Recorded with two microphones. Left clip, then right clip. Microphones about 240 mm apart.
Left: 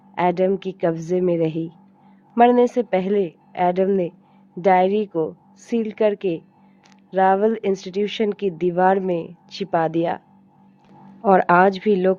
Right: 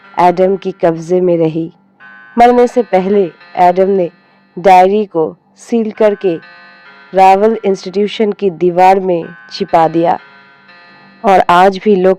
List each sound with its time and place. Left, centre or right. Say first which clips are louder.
0.2 s a woman's voice: right 10 dB; right